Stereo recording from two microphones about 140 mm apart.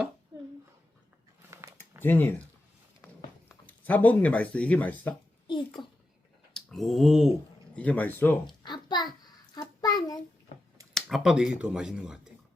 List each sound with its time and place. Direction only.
2.0 s speech: 15° left (ahead or behind)
3.7 s speech: 10° left (ahead or behind)
5.8 s a child's voice: 35° left (ahead or behind)
6.5 s a sound: 5° left (ahead or behind)
7.8 s speech: 10° left (ahead or behind)
8.6 s a sound: 30° left (ahead or behind)
9.6 s child singing: 25° left (ahead or behind)
10.9 s speech: centre (ahead or behind)